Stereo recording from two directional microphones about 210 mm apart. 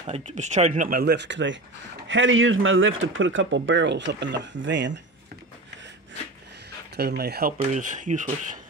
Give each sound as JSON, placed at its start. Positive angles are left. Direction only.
{"t": 0.0, "sound": "speech", "side_deg": -30}
{"t": 7.0, "sound": "speech", "side_deg": -50}
{"t": 7.5, "sound": "speech", "side_deg": -35}